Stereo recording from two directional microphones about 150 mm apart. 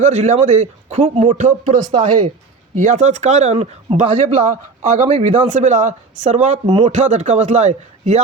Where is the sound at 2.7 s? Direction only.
55° right (ahead or behind).